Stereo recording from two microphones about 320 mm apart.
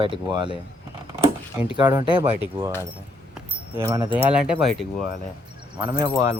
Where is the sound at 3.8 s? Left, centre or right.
Centre.